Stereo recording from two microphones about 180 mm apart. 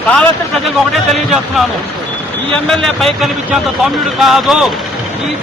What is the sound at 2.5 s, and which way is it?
Speech, 5° left (ahead or behind).